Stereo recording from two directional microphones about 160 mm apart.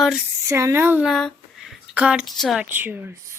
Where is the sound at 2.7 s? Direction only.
10° right (ahead or behind).